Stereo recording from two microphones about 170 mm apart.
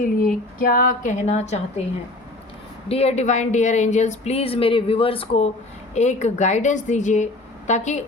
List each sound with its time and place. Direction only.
0.0 s a woman's voice: 55° left (ahead or behind)
2.9 s a woman's voice: 40° left (ahead or behind)